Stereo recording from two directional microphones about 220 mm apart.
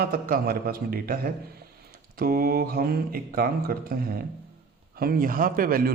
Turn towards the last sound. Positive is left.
turn(degrees=-40)  # may be behind; listen again after turning